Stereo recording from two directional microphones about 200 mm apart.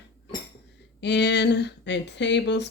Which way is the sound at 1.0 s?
60° left (ahead or behind).